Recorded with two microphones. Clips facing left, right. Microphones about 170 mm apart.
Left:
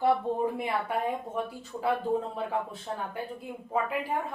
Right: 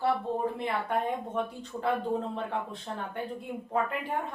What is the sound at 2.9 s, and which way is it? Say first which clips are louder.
A woman's voice: even; 10° left (ahead or behind).